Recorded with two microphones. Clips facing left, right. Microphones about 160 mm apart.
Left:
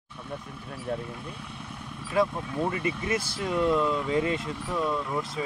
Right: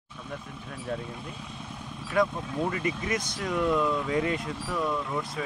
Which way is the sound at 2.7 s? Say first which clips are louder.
Left 1 dB; 25° left (ahead or behind).